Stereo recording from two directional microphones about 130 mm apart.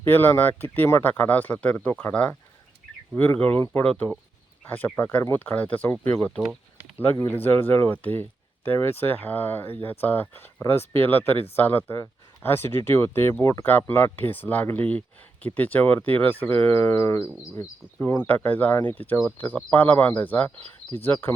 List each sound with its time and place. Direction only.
0.0 s speech: 15° left (ahead or behind)
6.4 s a sound: 5° right (ahead or behind)
7.0 s speech: 15° left (ahead or behind)